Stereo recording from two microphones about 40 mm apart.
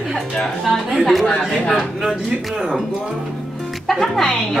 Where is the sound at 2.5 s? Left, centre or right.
Centre.